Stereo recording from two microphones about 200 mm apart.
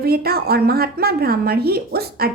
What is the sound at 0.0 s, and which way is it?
Speech, 50° right (ahead or behind).